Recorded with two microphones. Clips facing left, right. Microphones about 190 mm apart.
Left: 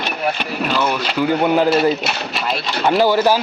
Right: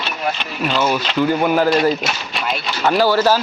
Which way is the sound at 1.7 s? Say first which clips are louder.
Even; 5° left (ahead or behind).